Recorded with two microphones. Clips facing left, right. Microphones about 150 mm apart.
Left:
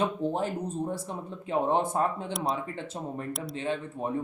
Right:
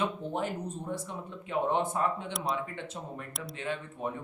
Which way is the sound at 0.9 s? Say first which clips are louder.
Left 3 dB; 35° left (ahead or behind).